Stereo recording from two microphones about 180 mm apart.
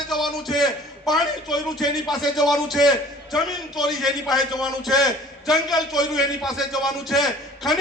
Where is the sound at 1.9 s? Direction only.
20° left (ahead or behind).